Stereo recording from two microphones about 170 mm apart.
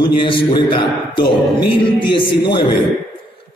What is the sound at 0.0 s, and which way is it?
A man's voice, 30° left (ahead or behind).